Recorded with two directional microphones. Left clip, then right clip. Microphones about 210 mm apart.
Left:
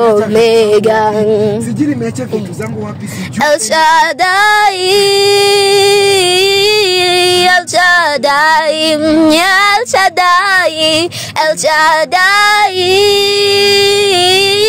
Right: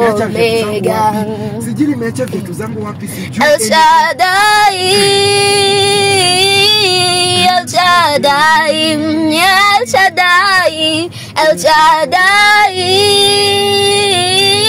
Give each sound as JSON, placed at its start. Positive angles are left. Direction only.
{"t": 0.3, "sound": "music", "side_deg": 55}
{"t": 3.3, "sound": "female singing", "side_deg": 50}